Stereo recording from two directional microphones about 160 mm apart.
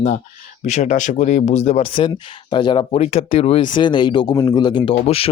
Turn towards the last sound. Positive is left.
turn(degrees=35)  # may be behind; listen again after turning